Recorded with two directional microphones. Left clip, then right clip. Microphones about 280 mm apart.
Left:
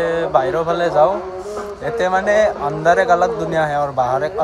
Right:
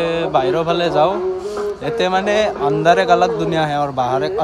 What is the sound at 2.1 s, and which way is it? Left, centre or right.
A man's voice, centre.